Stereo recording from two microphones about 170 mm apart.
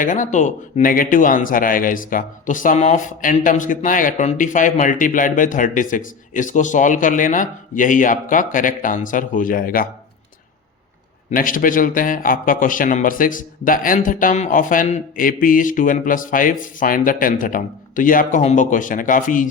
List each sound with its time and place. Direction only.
0.0 s a man's voice: 50° left (ahead or behind)
11.3 s a man's voice: 55° left (ahead or behind)